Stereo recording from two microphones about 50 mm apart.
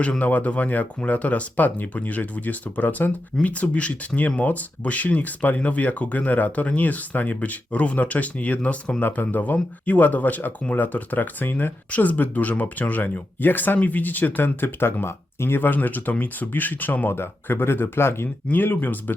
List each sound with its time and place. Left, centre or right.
0.2 s speech: left
17.2 s speech: left
18.4 s speech: left